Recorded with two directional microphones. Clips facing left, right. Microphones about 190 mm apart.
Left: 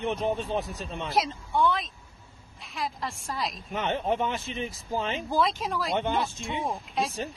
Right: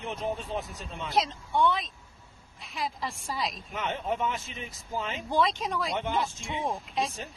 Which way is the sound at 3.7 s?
30° left (ahead or behind).